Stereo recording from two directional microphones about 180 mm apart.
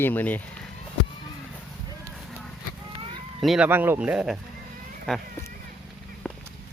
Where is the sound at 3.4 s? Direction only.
5° right (ahead or behind).